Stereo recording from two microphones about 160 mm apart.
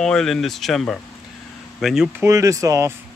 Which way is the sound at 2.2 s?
20° right (ahead or behind).